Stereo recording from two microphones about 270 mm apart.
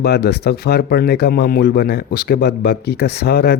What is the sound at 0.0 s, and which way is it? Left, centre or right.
Speech, left.